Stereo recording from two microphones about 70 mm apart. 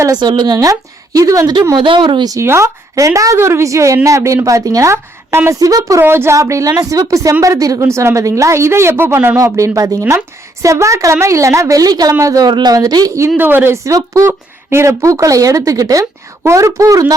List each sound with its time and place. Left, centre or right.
0.2 s speech: right
1.7 s speech: right
2.4 s a woman's voice: right
3.3 s a woman's voice: right
6.0 s speech: right
6.3 s a woman's voice: right
7.8 s speech: right
9.4 s a woman's voice: right
12.7 s speech: right
13.3 s speech: right
13.7 s a woman's voice: right
14.3 s a woman's voice: right